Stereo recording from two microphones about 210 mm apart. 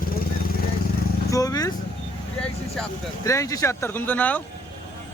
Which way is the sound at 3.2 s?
15° left (ahead or behind).